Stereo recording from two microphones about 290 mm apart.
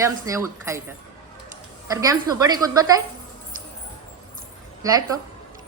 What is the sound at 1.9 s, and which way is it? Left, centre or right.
A woman's voice, centre.